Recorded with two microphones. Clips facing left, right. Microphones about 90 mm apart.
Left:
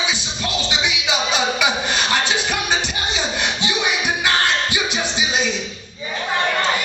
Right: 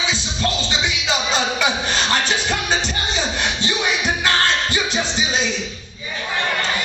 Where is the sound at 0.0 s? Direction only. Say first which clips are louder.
Right 2 dB; 15° left (ahead or behind).